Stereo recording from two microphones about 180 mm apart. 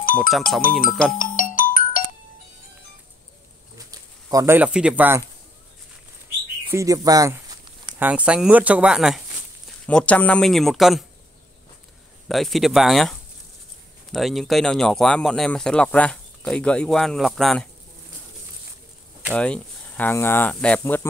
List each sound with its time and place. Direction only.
0.0 s music: 50° left (ahead or behind)
0.6 s speech: 50° left (ahead or behind)
1.1 s music: 50° left (ahead or behind)
3.7 s a sound: 20° right (ahead or behind)
6.7 s a sound: 15° right (ahead or behind)
8.0 s speech: 5° right (ahead or behind)
9.8 s speech: 5° left (ahead or behind)
12.3 s speech: centre (ahead or behind)
19.3 s speech: 5° left (ahead or behind)